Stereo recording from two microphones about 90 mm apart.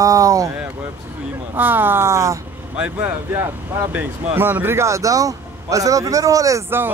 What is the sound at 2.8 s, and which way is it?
Speech, 20° right (ahead or behind).